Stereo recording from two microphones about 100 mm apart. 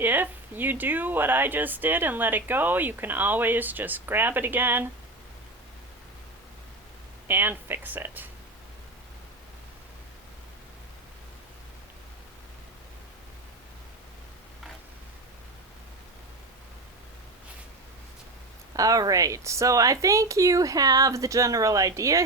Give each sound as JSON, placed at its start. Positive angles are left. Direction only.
{"t": 0.0, "sound": "speech", "side_deg": -20}
{"t": 7.3, "sound": "speech", "side_deg": -20}
{"t": 18.8, "sound": "speech", "side_deg": -35}